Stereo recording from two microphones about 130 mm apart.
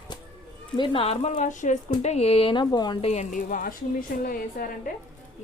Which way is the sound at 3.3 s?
90° left.